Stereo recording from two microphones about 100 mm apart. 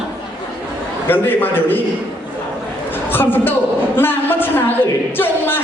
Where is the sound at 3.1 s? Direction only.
20° left (ahead or behind).